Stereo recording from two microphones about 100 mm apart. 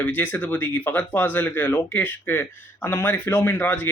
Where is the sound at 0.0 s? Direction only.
15° left (ahead or behind).